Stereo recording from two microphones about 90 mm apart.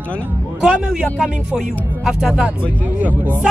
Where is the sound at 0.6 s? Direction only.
10° right (ahead or behind).